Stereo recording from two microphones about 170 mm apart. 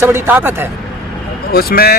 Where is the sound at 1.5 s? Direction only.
65° left (ahead or behind).